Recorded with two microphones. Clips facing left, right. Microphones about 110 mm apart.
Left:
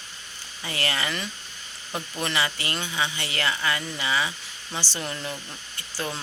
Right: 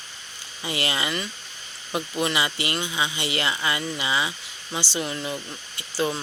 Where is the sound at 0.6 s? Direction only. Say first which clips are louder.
Right 2 dB; 15° right (ahead or behind).